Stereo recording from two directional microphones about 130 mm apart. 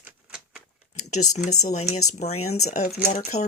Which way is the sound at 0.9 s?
65° left (ahead or behind).